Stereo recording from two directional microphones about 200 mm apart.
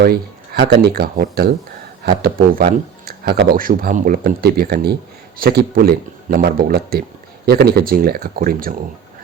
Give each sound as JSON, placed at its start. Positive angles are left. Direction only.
{"t": 0.0, "sound": "speech", "side_deg": -55}